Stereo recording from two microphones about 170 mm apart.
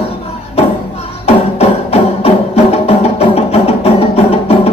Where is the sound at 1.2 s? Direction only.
35° left (ahead or behind).